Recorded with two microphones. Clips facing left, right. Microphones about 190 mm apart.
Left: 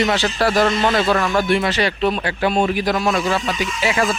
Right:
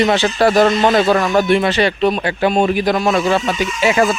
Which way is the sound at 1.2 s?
20° right (ahead or behind).